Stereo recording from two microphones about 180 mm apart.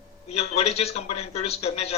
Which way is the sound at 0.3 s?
35° left (ahead or behind).